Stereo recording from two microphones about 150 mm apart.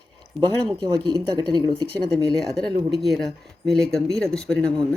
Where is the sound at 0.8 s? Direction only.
30° right (ahead or behind).